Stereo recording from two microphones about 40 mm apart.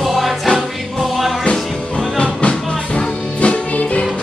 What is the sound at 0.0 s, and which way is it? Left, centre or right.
Music, centre.